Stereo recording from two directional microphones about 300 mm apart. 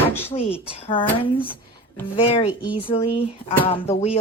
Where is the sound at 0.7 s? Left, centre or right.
Centre.